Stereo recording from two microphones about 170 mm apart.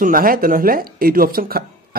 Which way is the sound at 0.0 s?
55° right (ahead or behind).